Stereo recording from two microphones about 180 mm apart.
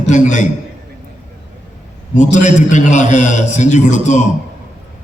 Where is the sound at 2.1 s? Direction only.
45° left (ahead or behind).